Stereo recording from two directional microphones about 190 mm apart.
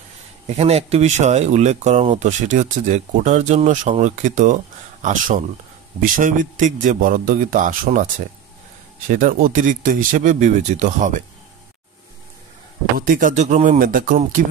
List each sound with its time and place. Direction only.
0.5 s speech: 35° right (ahead or behind)
13.0 s speech: 45° right (ahead or behind)